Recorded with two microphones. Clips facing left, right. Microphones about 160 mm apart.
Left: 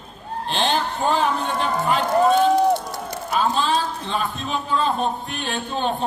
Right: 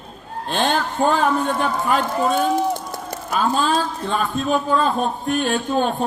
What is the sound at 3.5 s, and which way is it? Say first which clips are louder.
Speech: right 2 dB; 45° right (ahead or behind).